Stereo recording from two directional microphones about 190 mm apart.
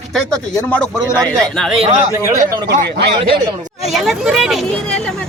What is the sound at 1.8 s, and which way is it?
Speech, 35° right (ahead or behind).